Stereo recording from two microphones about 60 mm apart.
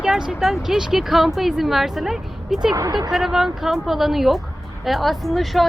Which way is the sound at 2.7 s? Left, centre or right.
Right.